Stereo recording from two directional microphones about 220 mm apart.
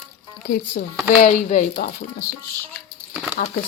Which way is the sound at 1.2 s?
35° left (ahead or behind).